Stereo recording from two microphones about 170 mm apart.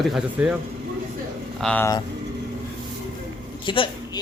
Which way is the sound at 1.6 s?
5° left (ahead or behind).